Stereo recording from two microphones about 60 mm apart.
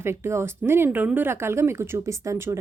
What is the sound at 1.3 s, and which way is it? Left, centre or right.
Speech, right.